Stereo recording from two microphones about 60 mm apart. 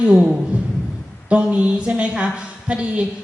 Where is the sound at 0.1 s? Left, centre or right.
Centre.